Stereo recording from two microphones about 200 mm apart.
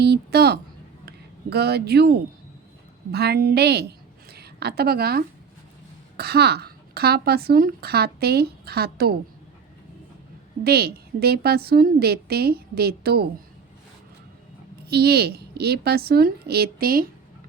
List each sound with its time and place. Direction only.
0.0 s a woman's voice: 55° right (ahead or behind)
10.6 s speech: 50° right (ahead or behind)
14.8 s speech: 55° right (ahead or behind)